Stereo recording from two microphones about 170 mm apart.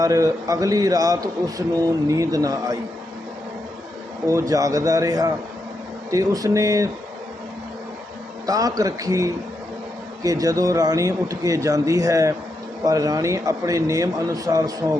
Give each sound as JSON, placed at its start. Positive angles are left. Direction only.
{"t": 0.0, "sound": "a man's voice", "side_deg": -20}
{"t": 4.3, "sound": "a man's voice", "side_deg": -20}
{"t": 8.4, "sound": "a man's voice", "side_deg": -20}